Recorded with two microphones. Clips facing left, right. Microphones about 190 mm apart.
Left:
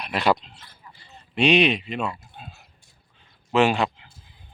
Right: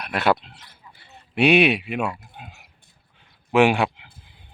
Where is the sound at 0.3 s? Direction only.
65° right (ahead or behind).